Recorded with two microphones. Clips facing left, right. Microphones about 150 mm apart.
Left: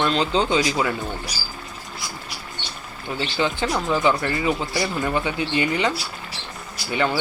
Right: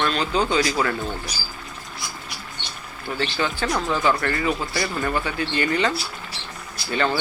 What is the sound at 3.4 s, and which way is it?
Speech, 20° left (ahead or behind).